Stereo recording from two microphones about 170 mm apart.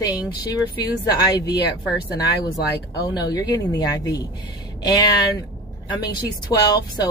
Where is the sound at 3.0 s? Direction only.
25° left (ahead or behind).